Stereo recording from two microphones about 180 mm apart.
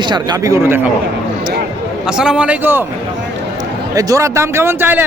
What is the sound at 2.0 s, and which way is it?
Speech, 5° right (ahead or behind).